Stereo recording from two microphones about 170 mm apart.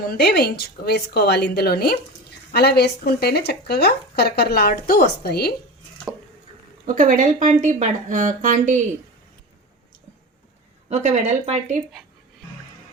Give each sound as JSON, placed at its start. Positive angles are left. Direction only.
{"t": 0.0, "sound": "speech", "side_deg": 65}
{"t": 6.8, "sound": "speech", "side_deg": -50}
{"t": 10.8, "sound": "speech", "side_deg": -40}